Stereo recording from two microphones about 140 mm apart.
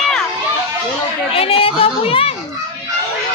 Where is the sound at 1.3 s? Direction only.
45° left (ahead or behind).